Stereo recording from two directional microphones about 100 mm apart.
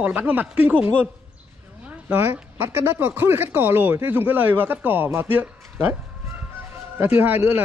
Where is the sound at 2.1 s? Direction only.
20° right (ahead or behind).